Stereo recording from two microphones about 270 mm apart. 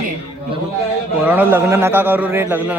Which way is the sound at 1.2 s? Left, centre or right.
Centre.